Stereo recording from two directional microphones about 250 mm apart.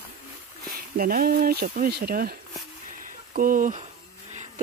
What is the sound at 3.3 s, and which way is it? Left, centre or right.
Speech, right.